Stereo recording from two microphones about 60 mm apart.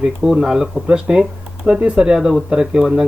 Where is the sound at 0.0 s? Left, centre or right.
Centre.